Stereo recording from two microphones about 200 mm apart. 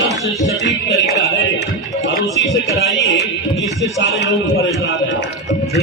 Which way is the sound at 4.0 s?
60° left (ahead or behind).